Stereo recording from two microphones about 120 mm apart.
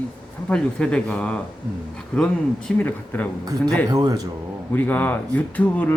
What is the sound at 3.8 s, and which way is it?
Speech, 30° right (ahead or behind).